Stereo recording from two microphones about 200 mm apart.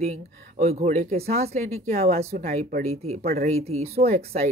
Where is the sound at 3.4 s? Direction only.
30° right (ahead or behind).